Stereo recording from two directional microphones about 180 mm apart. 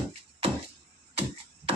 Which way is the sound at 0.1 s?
35° right (ahead or behind).